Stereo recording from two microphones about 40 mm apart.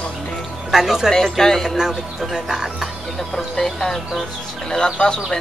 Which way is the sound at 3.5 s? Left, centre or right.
Centre.